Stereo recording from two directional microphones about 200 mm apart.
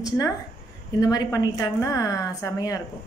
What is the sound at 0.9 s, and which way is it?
A woman's voice, 20° left (ahead or behind).